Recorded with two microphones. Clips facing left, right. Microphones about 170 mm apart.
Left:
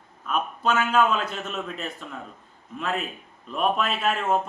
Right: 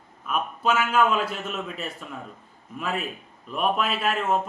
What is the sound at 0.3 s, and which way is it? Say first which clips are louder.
Speech: even; 5° right (ahead or behind).